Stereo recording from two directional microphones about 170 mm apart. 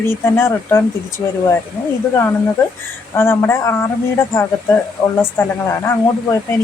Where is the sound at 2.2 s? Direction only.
15° left (ahead or behind).